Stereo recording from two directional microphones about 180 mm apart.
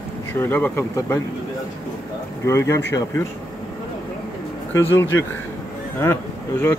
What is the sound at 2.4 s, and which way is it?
Speech, 15° left (ahead or behind).